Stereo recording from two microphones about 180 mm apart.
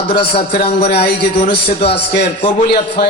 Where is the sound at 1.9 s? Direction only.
70° left (ahead or behind).